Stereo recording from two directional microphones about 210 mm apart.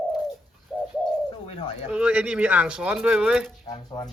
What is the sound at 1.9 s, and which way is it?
Speech, 5° right (ahead or behind).